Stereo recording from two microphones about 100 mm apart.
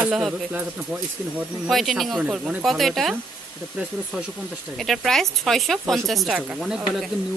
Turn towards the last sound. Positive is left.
turn(degrees=-5)  # may be behind; listen again after turning